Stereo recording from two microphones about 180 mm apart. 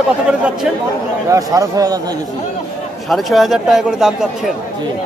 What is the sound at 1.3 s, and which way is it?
Speech, 20° right (ahead or behind).